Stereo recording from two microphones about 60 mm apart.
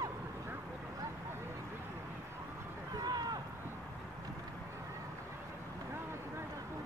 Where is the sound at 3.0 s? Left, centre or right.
Right.